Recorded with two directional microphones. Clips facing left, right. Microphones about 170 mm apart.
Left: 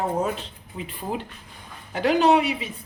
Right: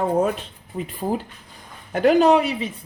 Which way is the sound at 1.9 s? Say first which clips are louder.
Right 4 dB; 50° right (ahead or behind).